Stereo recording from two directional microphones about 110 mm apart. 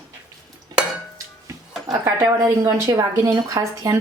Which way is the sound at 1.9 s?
30° right (ahead or behind).